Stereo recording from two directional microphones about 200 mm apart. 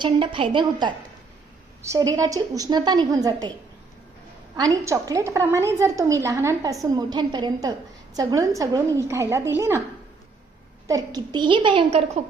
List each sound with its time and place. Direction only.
0.0 s a woman's voice: 25° right (ahead or behind)
4.5 s a woman's voice: 15° right (ahead or behind)
10.8 s a woman's voice: 20° right (ahead or behind)